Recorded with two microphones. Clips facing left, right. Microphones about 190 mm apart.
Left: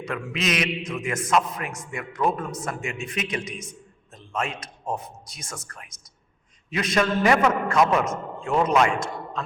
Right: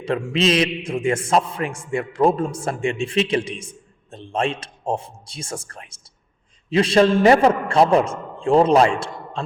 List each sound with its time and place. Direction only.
0.0 s a man's voice: 30° right (ahead or behind)